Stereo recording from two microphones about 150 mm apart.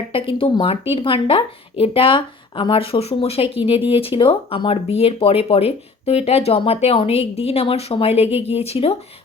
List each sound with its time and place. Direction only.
0.1 s speech: 35° left (ahead or behind)